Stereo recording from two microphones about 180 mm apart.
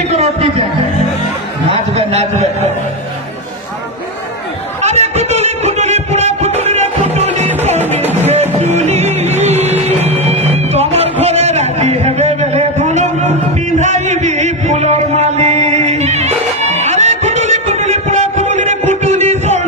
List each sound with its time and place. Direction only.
0.1 s music: 35° right (ahead or behind)
1.7 s a man's voice: 35° right (ahead or behind)
4.8 s music: 40° right (ahead or behind)